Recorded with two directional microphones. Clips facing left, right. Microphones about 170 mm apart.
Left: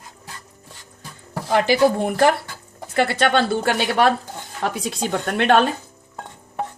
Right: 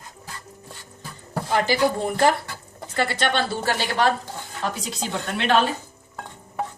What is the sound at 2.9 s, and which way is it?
Speech, 60° left (ahead or behind).